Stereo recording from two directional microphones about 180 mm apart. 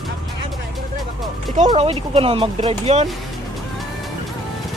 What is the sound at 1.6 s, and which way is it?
Speech, 30° right (ahead or behind).